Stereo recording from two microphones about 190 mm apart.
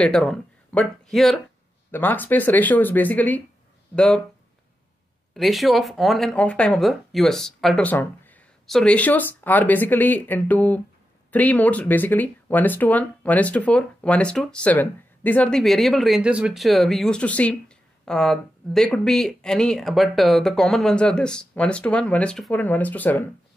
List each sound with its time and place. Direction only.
0.0 s speech: 5° left (ahead or behind)
5.3 s speech: centre (ahead or behind)